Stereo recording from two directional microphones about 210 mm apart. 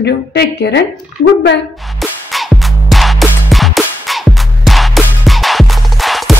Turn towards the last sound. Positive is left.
turn(degrees=0)  # may be behind; listen again after turning